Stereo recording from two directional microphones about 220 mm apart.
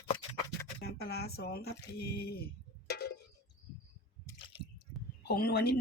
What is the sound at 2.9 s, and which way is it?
Cowbell, 50° left (ahead or behind).